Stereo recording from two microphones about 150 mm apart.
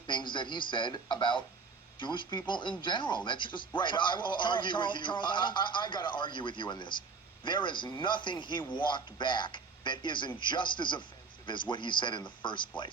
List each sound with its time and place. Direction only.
0.1 s speech: 30° left (ahead or behind)